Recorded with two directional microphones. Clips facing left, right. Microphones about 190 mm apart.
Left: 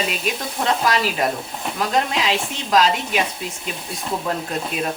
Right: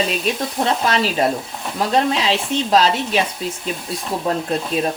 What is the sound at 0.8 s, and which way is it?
Speech, 30° right (ahead or behind).